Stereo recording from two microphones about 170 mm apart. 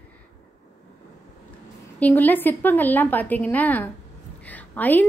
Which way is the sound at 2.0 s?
10° left (ahead or behind).